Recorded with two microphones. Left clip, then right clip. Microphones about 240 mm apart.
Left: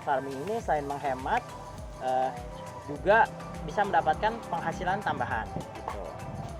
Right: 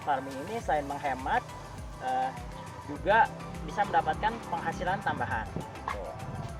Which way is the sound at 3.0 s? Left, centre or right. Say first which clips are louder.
Left 1 dB; left.